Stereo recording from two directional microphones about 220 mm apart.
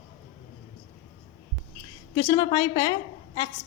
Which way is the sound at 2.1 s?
15° left (ahead or behind).